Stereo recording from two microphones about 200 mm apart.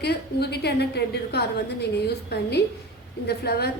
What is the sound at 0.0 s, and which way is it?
A woman's voice, 55° left (ahead or behind).